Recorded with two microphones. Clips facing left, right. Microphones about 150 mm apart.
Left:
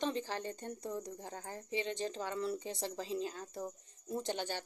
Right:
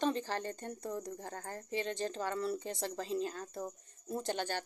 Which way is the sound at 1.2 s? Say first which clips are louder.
Right 2 dB; 55° right (ahead or behind).